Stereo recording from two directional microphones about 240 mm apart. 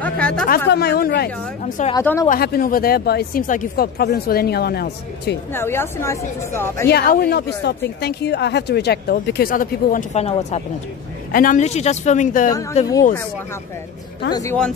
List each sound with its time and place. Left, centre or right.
0.0 s a sound: centre
0.7 s speech: left
1.6 s speech: left
2.0 s a woman's voice: centre
2.2 s speech: left
5.5 s a woman's voice: centre
6.9 s a woman's voice: left
14.3 s a woman's voice: centre